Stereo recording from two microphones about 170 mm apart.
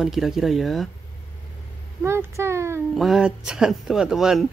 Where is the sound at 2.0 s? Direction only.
15° right (ahead or behind).